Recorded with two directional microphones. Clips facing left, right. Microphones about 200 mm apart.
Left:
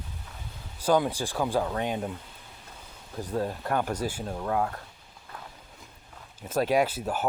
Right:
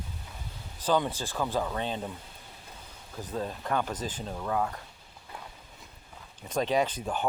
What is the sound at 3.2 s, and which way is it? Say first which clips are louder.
Speech: left 4 dB; 10° left (ahead or behind).